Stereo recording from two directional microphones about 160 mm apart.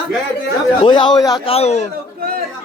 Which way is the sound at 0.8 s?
30° left (ahead or behind).